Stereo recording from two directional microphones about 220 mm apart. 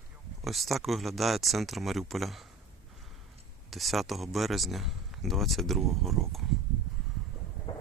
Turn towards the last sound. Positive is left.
turn(degrees=20)  # may be behind; listen again after turning